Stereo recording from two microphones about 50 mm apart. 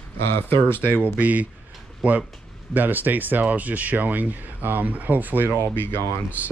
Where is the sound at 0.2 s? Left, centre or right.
Left.